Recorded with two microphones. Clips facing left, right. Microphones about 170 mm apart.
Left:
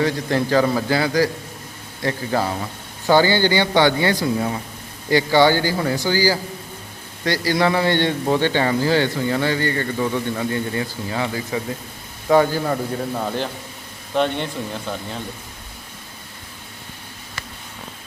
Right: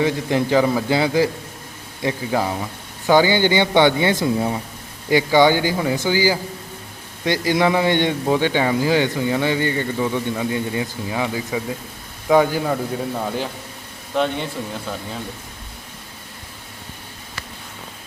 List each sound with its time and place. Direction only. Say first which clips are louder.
0.0 s a man's voice: right 1 dB; 15° right (ahead or behind)